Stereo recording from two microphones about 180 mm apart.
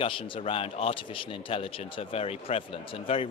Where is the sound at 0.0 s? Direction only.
30° left (ahead or behind).